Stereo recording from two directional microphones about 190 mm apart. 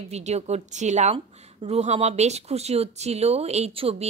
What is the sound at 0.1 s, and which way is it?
A woman's voice, 35° right (ahead or behind).